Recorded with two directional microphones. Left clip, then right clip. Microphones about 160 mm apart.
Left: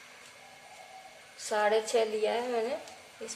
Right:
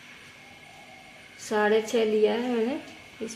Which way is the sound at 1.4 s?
15° right (ahead or behind).